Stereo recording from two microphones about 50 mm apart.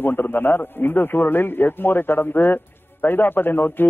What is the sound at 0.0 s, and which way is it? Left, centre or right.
A man's voice, left.